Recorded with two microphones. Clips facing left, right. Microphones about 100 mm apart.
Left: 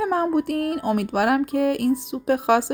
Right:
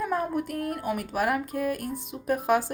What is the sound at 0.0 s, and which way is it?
Speech, 70° left (ahead or behind).